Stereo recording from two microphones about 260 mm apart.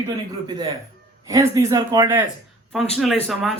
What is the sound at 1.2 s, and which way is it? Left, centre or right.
A man's voice, centre.